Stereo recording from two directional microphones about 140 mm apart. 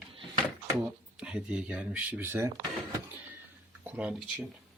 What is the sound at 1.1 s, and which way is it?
Speech, 5° right (ahead or behind).